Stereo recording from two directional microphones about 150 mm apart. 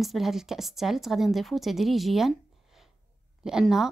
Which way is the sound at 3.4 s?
5° right (ahead or behind).